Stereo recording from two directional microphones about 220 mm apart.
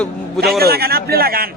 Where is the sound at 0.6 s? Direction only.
45° right (ahead or behind).